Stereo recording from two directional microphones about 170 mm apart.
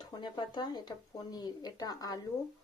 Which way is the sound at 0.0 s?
25° left (ahead or behind).